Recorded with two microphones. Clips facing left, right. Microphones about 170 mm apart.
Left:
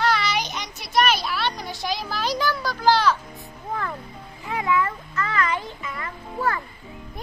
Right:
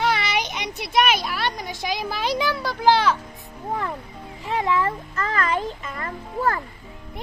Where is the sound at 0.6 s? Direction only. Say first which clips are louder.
Right 1 dB; 60° right (ahead or behind).